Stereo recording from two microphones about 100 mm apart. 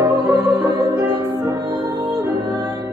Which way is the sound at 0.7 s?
70° left (ahead or behind).